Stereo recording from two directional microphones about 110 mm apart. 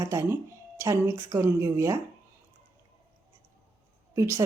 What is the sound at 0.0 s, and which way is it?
Speech, 25° right (ahead or behind).